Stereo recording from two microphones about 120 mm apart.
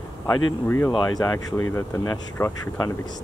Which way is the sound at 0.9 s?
35° left (ahead or behind).